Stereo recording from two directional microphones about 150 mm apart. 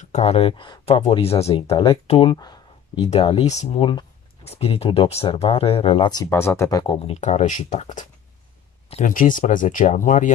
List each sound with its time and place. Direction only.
0.0 s speech: 45° left (ahead or behind)
6.3 s speech: 15° left (ahead or behind)
7.2 s speech: 50° left (ahead or behind)